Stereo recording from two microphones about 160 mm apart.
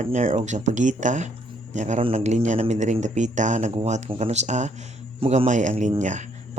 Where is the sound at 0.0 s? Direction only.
45° right (ahead or behind).